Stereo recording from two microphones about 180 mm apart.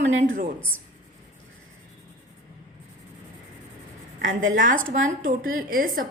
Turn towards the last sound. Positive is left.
turn(degrees=-50)  # may be behind; listen again after turning